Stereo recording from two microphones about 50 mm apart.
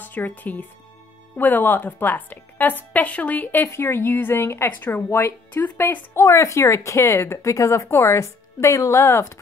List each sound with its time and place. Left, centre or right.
0.0 s a woman's voice: left
3.6 s speech: left
6.1 s a woman's voice: left
9.0 s speech: left